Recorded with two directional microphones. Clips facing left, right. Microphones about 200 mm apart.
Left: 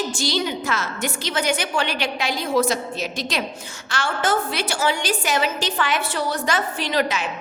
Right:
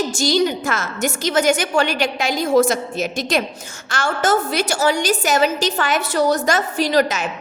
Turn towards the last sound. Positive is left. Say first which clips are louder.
# right 5 dB
turn(degrees=-45)  # may be behind; listen again after turning